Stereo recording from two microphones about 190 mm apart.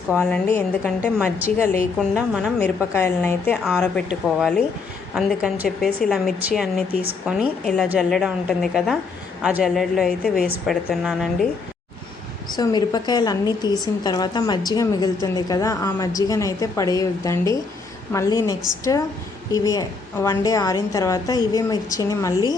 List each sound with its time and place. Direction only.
0.2 s a woman's voice: 5° left (ahead or behind)
2.0 s a woman's voice: centre (ahead or behind)
2.6 s a woman's voice: 10° left (ahead or behind)
12.5 s a woman's voice: 20° left (ahead or behind)